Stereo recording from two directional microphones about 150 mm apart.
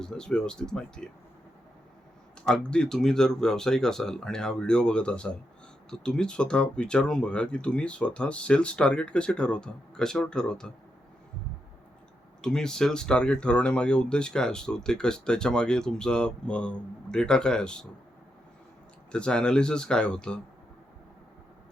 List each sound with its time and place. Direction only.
0.0 s speech: 5° left (ahead or behind)
2.4 s speech: 5° left (ahead or behind)
12.4 s speech: 5° left (ahead or behind)
19.1 s speech: 5° left (ahead or behind)